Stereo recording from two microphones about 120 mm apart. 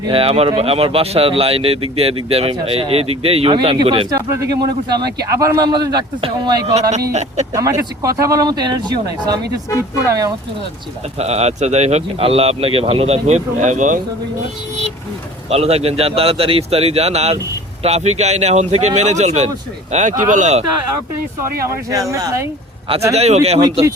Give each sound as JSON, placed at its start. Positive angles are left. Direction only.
{"t": 0.1, "sound": "speech", "side_deg": -50}
{"t": 3.5, "sound": "speech", "side_deg": -45}
{"t": 4.1, "sound": "a man's voice", "side_deg": -25}
{"t": 7.1, "sound": "speech", "side_deg": -70}
{"t": 7.5, "sound": "a man's voice", "side_deg": -30}
{"t": 11.2, "sound": "speech", "side_deg": -65}
{"t": 15.4, "sound": "speech", "side_deg": -60}
{"t": 19.9, "sound": "speech", "side_deg": -85}
{"t": 22.1, "sound": "speech", "side_deg": -25}
{"t": 23.1, "sound": "speech", "side_deg": -60}